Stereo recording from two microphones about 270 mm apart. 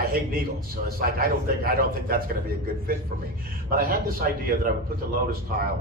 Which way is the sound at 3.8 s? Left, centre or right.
Right.